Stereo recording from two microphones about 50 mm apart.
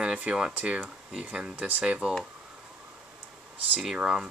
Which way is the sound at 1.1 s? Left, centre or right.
Right.